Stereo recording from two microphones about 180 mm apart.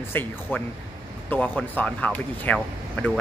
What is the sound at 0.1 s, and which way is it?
Speech, 10° left (ahead or behind).